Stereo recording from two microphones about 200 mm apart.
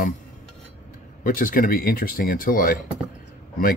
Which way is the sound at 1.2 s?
45° left (ahead or behind).